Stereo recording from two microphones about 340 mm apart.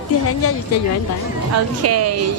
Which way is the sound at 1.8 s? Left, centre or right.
Right.